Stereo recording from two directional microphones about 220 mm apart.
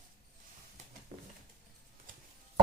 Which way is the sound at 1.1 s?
30° right (ahead or behind).